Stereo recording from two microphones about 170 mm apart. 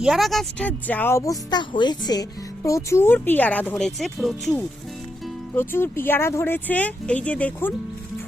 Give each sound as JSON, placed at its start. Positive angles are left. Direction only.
{"t": 0.0, "sound": "speech", "side_deg": 0}
{"t": 5.5, "sound": "speech", "side_deg": 15}